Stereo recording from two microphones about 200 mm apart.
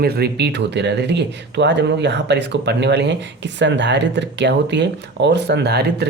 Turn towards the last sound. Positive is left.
turn(degrees=-55)  # may be behind; listen again after turning